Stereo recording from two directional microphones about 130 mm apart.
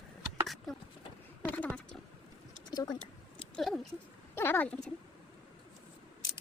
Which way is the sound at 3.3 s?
5° left (ahead or behind).